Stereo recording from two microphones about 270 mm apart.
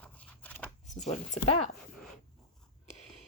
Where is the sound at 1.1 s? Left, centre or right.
Left.